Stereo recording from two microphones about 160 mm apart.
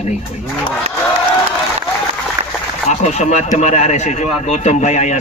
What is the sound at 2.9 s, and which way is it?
A man's voice, 45° left (ahead or behind).